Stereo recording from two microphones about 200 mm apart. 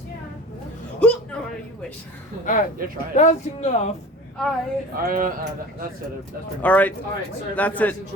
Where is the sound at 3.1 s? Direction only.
35° left (ahead or behind).